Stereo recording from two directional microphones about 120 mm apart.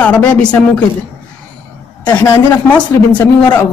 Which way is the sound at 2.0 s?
15° left (ahead or behind).